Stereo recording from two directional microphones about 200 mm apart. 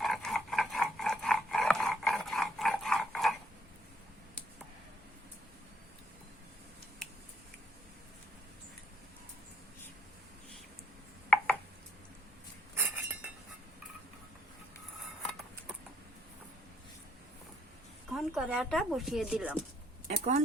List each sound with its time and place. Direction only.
0.0 s dog: centre (ahead or behind)
7.0 s a sound: 5° left (ahead or behind)
11.3 s a sound: 5° left (ahead or behind)
12.7 s cutlery: 10° right (ahead or behind)
18.1 s speech: 5° right (ahead or behind)
20.1 s speech: 35° right (ahead or behind)